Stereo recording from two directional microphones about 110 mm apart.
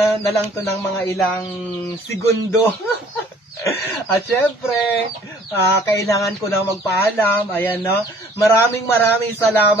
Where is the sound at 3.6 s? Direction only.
25° left (ahead or behind).